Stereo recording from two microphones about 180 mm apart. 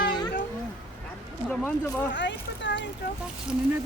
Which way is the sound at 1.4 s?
10° left (ahead or behind).